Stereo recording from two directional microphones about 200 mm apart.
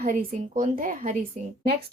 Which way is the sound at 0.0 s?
40° right (ahead or behind).